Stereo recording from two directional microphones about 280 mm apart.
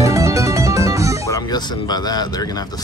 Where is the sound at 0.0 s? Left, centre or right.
Centre.